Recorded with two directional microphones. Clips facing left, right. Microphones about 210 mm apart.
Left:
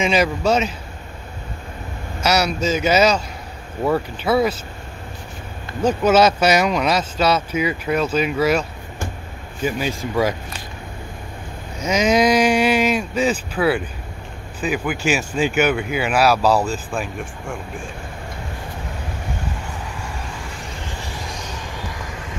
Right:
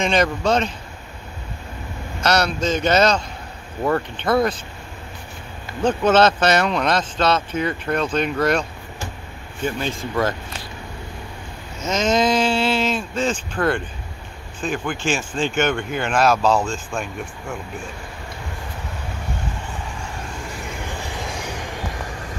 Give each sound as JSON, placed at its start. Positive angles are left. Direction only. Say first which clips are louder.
{"t": 0.0, "sound": "speech", "louder": "left 1 dB", "side_deg": 5}
{"t": 2.2, "sound": "speech", "louder": "left 1 dB", "side_deg": 5}
{"t": 5.8, "sound": "speech", "louder": "left 1 dB", "side_deg": 10}
{"t": 11.8, "sound": "speech", "louder": "left 3 dB", "side_deg": 10}
{"t": 16.5, "sound": "speech", "louder": "left 2 dB", "side_deg": 35}
{"t": 16.9, "sound": "speech", "louder": "left 2 dB", "side_deg": 0}